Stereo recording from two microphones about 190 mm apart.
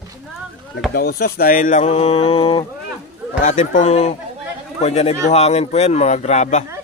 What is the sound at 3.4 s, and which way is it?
Speech, 40° left (ahead or behind).